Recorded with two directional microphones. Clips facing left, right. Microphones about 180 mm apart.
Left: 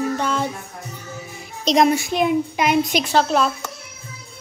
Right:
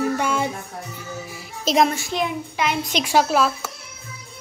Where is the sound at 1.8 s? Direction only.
15° left (ahead or behind).